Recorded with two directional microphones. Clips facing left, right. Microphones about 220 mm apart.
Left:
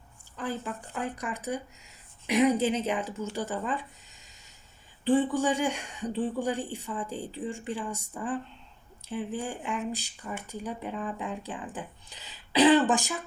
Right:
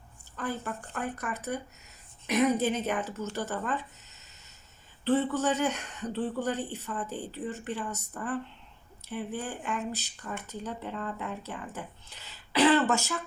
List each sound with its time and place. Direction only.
0.3 s speech: 15° left (ahead or behind)